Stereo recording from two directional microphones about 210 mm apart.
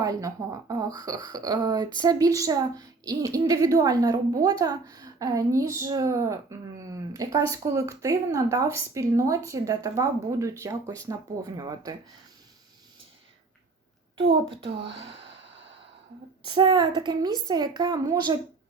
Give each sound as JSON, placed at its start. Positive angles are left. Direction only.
{"t": 0.0, "sound": "a woman's voice", "side_deg": -15}
{"t": 14.2, "sound": "a woman's voice", "side_deg": -25}
{"t": 16.6, "sound": "a woman's voice", "side_deg": -20}